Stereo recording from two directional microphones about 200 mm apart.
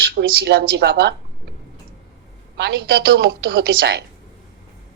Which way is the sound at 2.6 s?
55° right (ahead or behind).